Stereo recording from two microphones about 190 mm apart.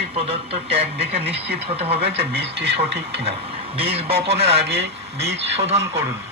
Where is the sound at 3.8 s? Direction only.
30° right (ahead or behind).